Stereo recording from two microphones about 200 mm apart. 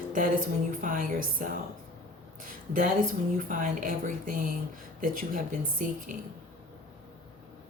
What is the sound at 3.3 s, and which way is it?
Speech, 40° right (ahead or behind).